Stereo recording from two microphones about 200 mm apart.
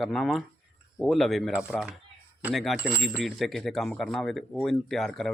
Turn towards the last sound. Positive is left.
turn(degrees=0)  # may be behind; listen again after turning